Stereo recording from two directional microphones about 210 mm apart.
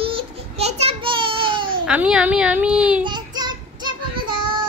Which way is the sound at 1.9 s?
5° right (ahead or behind).